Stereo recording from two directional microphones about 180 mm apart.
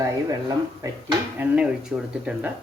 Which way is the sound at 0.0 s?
20° right (ahead or behind).